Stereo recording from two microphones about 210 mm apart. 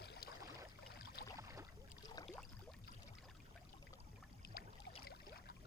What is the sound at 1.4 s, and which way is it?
Boat, 15° right (ahead or behind).